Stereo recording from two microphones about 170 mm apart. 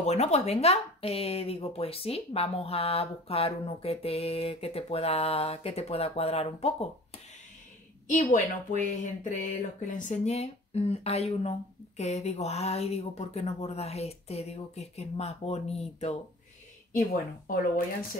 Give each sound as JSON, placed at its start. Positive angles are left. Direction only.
{"t": 0.0, "sound": "speech", "side_deg": 40}
{"t": 8.1, "sound": "a woman's voice", "side_deg": 50}
{"t": 17.1, "sound": "speech", "side_deg": 55}